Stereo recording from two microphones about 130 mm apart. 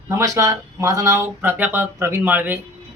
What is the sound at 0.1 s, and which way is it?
Speech, 25° right (ahead or behind).